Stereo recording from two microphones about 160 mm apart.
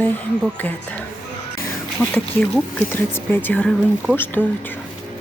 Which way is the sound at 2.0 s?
Centre (ahead or behind).